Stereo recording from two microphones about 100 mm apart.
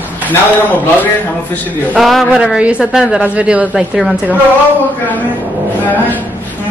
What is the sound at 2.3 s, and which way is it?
A woman's voice, 10° right (ahead or behind).